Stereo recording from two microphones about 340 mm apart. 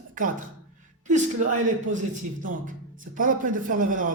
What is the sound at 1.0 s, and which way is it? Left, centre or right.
A man's voice, right.